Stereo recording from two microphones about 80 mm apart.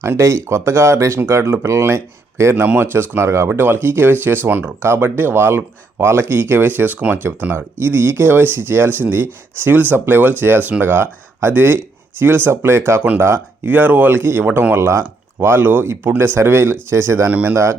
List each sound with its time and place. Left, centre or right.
0.0 s speech: right
17.2 s speech: right